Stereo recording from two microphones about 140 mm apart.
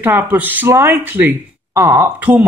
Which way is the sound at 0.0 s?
15° right (ahead or behind).